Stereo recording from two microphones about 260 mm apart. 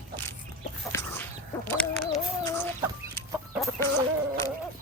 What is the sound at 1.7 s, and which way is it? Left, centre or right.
Chicken, centre.